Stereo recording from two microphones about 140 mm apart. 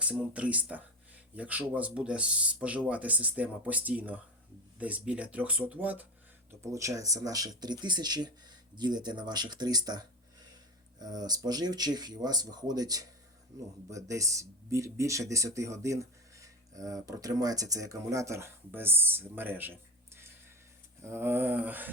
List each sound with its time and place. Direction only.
0.0 s speech: 10° right (ahead or behind)